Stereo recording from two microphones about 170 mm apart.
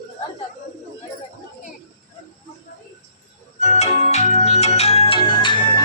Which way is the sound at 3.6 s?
40° left (ahead or behind).